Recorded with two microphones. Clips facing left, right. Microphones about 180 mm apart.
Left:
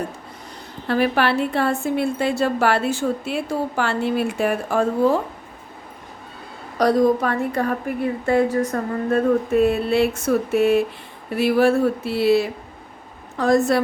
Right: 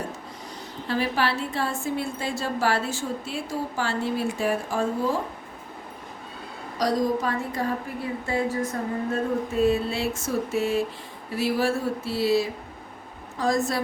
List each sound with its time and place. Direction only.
0.9 s a woman's voice: 60° left (ahead or behind)
6.7 s a woman's voice: 60° left (ahead or behind)